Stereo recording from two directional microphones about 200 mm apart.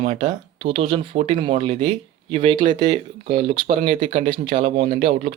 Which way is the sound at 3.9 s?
40° right (ahead or behind).